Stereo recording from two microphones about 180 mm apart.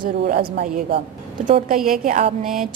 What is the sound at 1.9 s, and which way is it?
Speech, 50° right (ahead or behind).